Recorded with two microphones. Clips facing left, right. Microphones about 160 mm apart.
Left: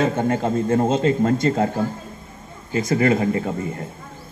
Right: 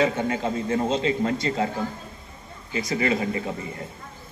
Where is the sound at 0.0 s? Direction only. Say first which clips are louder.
Left 3 dB; 50° left (ahead or behind).